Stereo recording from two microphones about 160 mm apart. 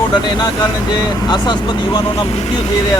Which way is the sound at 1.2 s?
25° left (ahead or behind).